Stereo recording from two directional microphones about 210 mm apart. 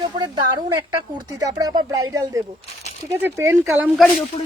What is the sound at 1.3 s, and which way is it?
Speech, 20° right (ahead or behind).